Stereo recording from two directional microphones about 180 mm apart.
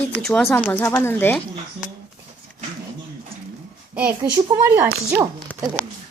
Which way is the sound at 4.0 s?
10° right (ahead or behind).